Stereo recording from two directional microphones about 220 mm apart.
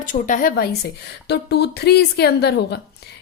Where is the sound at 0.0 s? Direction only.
35° left (ahead or behind).